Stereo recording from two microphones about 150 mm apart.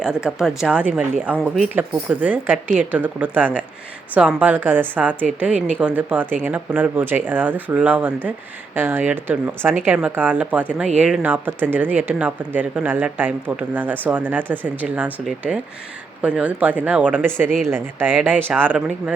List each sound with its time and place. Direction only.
0.0 s speech: 5° right (ahead or behind)